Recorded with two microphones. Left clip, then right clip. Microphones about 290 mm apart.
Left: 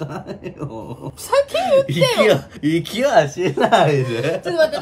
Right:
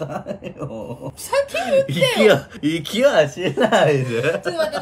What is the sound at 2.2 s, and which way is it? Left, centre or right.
Speech, centre.